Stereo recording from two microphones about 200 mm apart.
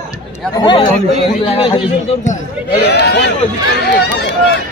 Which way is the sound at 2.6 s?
55° left (ahead or behind).